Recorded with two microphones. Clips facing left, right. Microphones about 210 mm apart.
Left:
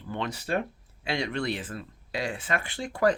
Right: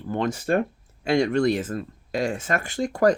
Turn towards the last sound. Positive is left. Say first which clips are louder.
# right 5 dB
turn(degrees=-45)  # may be behind; listen again after turning